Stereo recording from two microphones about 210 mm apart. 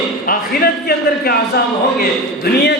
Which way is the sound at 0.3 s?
45° left (ahead or behind).